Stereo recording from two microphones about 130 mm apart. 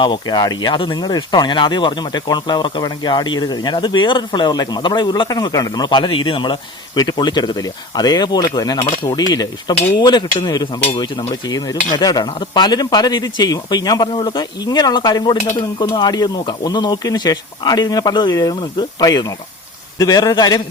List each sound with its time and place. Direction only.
0.0 s speech: 35° left (ahead or behind)